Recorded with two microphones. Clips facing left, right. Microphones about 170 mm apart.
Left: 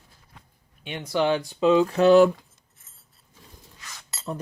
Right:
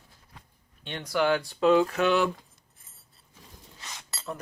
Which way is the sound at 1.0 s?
20° left (ahead or behind).